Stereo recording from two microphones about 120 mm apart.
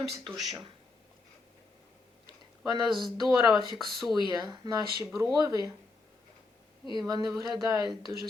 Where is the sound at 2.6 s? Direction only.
35° right (ahead or behind).